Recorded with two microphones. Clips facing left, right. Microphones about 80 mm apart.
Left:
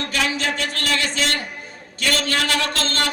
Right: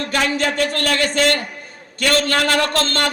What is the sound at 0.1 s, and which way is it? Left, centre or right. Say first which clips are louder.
A man's voice: right 4 dB; right.